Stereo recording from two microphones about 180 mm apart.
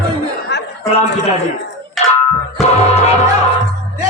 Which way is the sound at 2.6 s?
35° left (ahead or behind).